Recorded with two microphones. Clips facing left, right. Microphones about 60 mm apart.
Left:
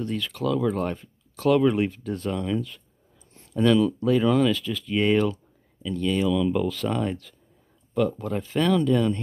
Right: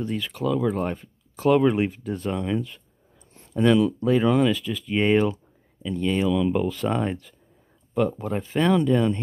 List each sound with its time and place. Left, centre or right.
0.0 s speech: centre